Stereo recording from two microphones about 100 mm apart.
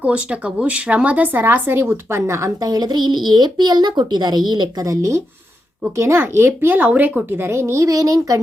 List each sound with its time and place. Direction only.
0.0 s speech: 10° right (ahead or behind); by 4.9 s 50° right (ahead or behind)
4.9 s speech: 30° right (ahead or behind)